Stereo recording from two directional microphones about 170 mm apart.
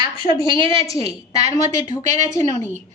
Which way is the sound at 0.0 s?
25° right (ahead or behind).